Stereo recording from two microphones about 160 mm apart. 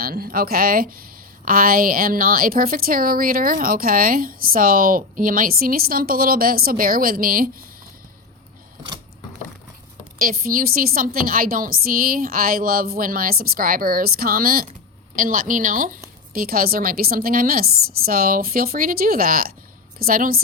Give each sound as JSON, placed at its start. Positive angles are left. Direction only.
{"t": 0.0, "sound": "a woman's voice", "side_deg": -65}
{"t": 10.2, "sound": "a woman's voice", "side_deg": -60}